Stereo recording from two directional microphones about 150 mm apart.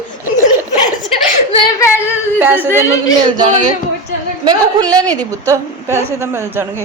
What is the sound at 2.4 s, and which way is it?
Speech, 15° right (ahead or behind).